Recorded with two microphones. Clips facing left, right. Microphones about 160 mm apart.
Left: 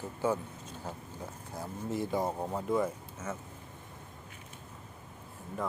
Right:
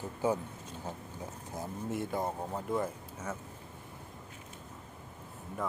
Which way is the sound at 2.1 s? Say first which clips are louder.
Left 5 dB; 15° left (ahead or behind).